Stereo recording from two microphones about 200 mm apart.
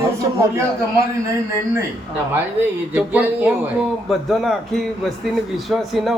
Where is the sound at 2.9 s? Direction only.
5° right (ahead or behind).